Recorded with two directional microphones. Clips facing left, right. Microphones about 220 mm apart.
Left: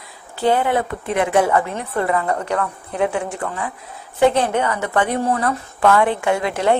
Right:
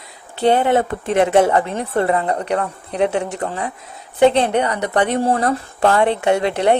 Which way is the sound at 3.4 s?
40° right (ahead or behind).